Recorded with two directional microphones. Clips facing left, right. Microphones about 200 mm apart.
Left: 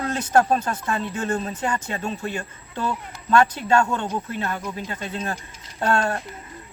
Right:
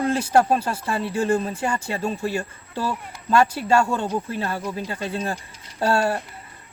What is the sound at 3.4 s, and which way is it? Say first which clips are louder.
Speech: right 1 dB; 10° right (ahead or behind).